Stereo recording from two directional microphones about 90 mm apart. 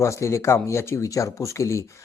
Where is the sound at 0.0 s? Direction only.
35° left (ahead or behind).